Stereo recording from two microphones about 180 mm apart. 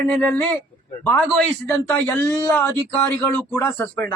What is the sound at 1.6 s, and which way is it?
Speech, 10° left (ahead or behind).